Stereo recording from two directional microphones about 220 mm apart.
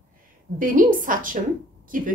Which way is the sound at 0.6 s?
40° right (ahead or behind).